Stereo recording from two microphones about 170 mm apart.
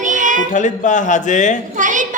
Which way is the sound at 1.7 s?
50° right (ahead or behind).